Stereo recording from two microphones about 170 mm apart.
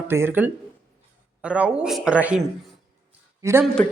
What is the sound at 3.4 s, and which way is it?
Speech, 15° right (ahead or behind).